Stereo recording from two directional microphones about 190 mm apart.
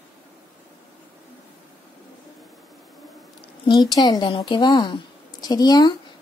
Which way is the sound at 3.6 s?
20° left (ahead or behind).